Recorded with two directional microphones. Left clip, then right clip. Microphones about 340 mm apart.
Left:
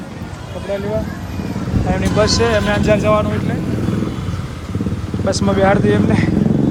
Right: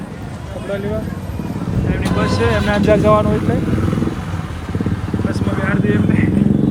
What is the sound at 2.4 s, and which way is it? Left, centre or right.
Speech, centre.